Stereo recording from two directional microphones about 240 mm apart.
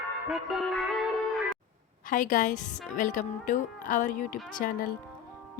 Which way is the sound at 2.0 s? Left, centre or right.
Left.